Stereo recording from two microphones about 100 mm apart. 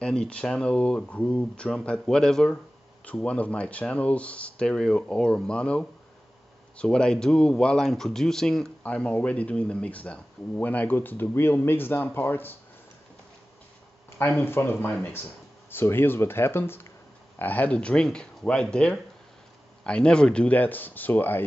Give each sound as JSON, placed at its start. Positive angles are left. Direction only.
{"t": 0.0, "sound": "speech", "side_deg": 10}
{"t": 14.1, "sound": "speech", "side_deg": 25}